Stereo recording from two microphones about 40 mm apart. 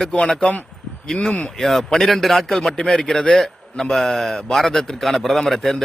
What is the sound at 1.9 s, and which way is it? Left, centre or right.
A man's voice, centre.